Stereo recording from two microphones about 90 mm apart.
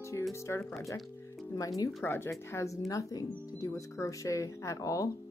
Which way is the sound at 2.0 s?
25° left (ahead or behind).